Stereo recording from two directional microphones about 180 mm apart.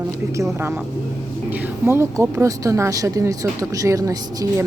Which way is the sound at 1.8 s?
15° right (ahead or behind).